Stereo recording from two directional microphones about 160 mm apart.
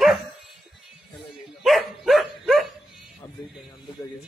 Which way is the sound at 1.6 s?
Centre (ahead or behind).